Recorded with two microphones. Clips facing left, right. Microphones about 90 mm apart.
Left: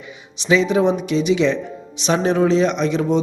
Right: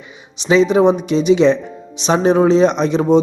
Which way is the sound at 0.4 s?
25° right (ahead or behind).